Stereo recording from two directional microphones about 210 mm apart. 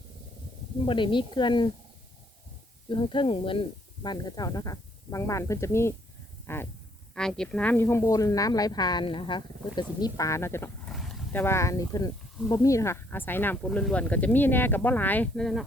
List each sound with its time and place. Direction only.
0.9 s speech: 25° left (ahead or behind)
2.9 s speech: 25° left (ahead or behind); by 15.6 s centre (ahead or behind)